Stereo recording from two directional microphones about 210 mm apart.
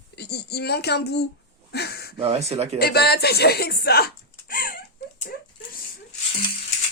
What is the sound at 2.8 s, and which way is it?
Speech, 50° left (ahead or behind).